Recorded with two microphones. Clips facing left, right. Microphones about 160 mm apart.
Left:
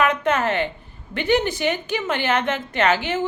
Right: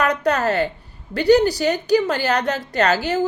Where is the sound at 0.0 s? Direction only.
40° right (ahead or behind).